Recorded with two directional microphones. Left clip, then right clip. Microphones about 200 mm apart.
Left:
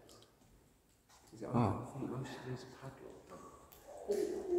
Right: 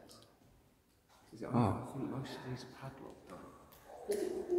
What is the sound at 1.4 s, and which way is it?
Speech, 40° right (ahead or behind).